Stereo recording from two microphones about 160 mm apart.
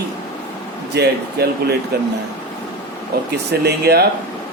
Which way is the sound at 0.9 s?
90° right.